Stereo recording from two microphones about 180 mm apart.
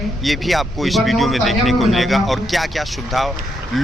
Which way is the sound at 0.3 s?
Centre (ahead or behind).